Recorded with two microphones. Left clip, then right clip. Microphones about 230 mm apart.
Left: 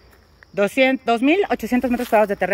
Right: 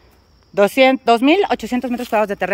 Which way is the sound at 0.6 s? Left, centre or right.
Centre.